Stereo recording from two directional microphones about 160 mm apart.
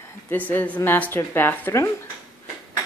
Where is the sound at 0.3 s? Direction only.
10° left (ahead or behind).